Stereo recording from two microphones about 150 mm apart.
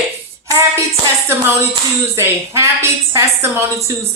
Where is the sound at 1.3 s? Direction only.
15° right (ahead or behind).